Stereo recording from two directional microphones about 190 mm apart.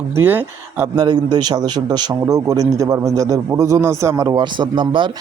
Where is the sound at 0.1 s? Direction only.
10° right (ahead or behind).